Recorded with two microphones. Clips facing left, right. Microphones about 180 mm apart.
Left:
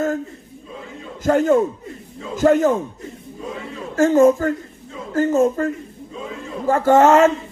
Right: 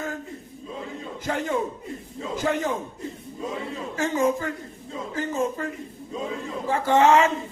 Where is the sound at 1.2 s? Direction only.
45° left (ahead or behind).